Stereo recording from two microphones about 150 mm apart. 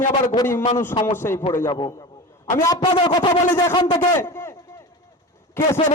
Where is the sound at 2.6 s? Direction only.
20° left (ahead or behind).